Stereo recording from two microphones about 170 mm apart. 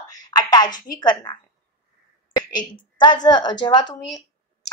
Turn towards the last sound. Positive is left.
turn(degrees=25)  # may be behind; listen again after turning